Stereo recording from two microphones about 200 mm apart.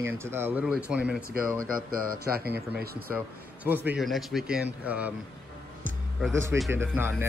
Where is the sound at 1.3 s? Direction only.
45° right (ahead or behind).